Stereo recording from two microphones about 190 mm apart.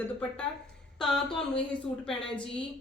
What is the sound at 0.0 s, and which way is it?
A woman's voice, 5° left (ahead or behind).